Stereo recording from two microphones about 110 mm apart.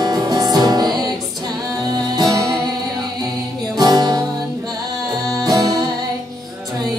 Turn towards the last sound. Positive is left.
turn(degrees=-35)  # may be behind; listen again after turning